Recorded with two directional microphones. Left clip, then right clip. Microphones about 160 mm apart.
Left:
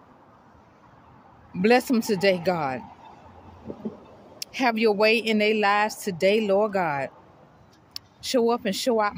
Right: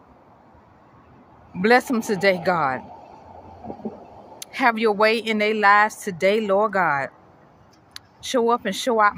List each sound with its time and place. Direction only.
1.6 s speech: 20° left (ahead or behind)
4.4 s speech: 15° left (ahead or behind)